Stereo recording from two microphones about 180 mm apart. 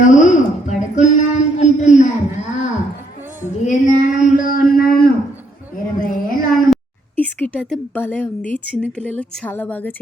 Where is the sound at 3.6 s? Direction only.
45° left (ahead or behind).